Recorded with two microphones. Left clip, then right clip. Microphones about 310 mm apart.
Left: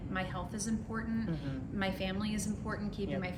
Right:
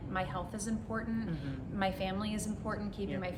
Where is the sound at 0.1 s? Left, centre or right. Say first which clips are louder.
Right 2 dB; centre.